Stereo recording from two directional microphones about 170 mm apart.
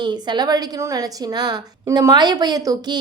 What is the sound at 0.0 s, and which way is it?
A woman's voice, 25° right (ahead or behind).